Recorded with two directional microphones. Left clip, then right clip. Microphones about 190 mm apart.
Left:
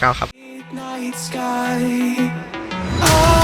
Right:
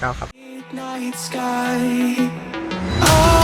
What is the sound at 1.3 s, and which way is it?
Music, centre (ahead or behind).